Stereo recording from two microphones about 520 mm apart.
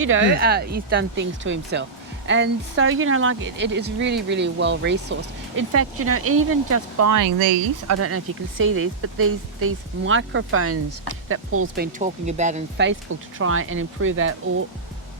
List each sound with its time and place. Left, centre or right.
0.0 s speech: right
7.3 s speech: right
7.9 s speech: right